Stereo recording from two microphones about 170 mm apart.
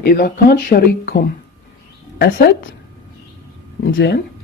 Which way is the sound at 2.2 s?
75° left (ahead or behind).